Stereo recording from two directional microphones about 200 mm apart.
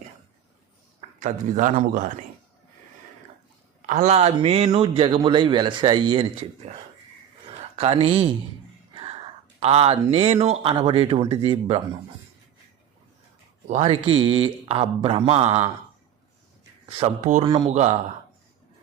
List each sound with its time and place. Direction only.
1.2 s a man's voice: 40° right (ahead or behind)
3.8 s a man's voice: 35° right (ahead or behind)
7.8 s speech: 30° right (ahead or behind)
8.9 s music: 25° right (ahead or behind)
9.6 s speech: 30° right (ahead or behind)
13.7 s speech: 30° right (ahead or behind)
17.0 s a man's voice: 40° right (ahead or behind)